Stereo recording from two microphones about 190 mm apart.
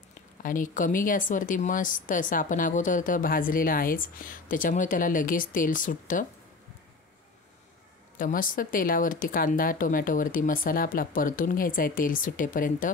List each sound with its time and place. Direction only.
0.4 s speech: 45° left (ahead or behind)
8.2 s speech: 45° left (ahead or behind)